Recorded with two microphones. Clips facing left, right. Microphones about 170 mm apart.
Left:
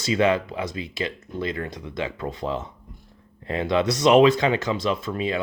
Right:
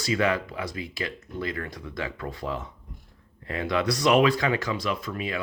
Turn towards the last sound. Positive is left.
turn(degrees=25)  # may be behind; listen again after turning